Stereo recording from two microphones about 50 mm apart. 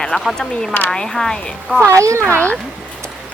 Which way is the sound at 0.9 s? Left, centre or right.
Centre.